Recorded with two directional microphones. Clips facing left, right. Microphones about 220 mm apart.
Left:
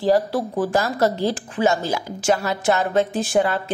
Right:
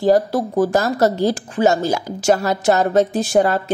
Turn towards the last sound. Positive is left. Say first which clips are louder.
# right 4 dB
turn(degrees=-40)  # may be behind; listen again after turning